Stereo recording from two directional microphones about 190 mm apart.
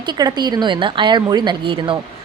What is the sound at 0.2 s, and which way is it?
A woman's voice, 20° right (ahead or behind).